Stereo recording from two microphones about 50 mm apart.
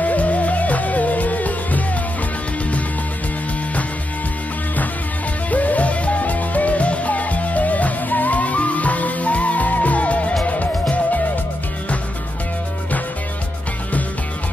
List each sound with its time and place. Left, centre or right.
0.0 s music: left
5.5 s music: left